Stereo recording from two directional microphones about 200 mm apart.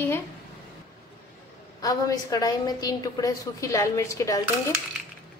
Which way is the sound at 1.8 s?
20° left (ahead or behind).